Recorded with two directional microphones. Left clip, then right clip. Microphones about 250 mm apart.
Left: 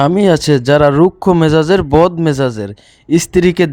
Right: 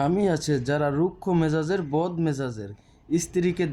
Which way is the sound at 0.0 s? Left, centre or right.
Left.